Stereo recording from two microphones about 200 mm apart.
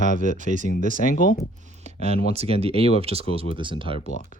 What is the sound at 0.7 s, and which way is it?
Speech, 40° left (ahead or behind).